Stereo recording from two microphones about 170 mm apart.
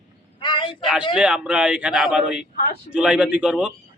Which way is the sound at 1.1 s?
5° right (ahead or behind).